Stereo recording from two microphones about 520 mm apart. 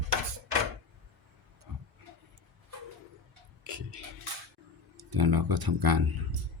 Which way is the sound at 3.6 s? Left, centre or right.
Right.